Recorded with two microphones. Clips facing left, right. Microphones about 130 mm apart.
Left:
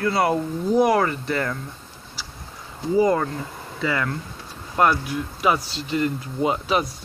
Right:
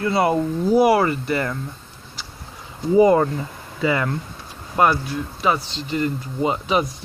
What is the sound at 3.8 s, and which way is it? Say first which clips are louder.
Speech: right 4 dB; 20° right (ahead or behind).